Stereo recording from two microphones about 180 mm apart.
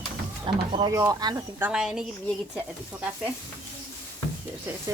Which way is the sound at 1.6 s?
5° right (ahead or behind).